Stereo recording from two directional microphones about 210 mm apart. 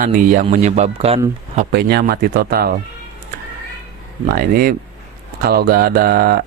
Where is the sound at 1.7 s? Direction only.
50° right (ahead or behind).